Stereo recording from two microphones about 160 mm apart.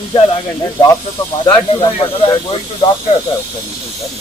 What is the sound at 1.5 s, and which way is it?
Speech, 30° left (ahead or behind).